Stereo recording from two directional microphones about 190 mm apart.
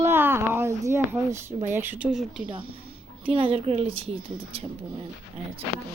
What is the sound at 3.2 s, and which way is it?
Speech, 25° right (ahead or behind).